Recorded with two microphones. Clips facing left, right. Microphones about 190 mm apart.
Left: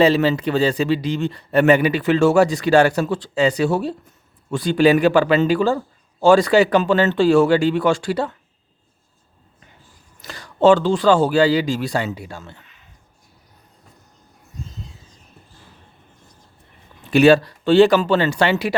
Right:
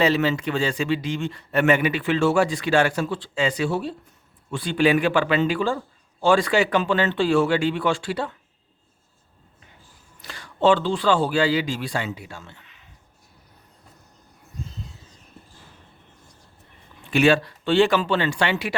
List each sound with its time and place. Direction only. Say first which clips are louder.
0.0 s a man's voice: left 5 dB; 35° left (ahead or behind)
10.2 s a man's voice: left 6 dB; 40° left (ahead or behind)
17.1 s a man's voice: left 6 dB; 40° left (ahead or behind)